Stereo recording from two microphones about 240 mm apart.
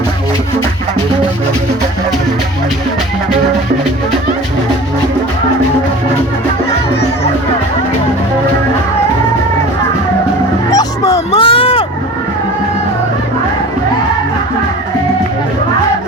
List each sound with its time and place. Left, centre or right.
10.7 s dog: centre
11.3 s run: left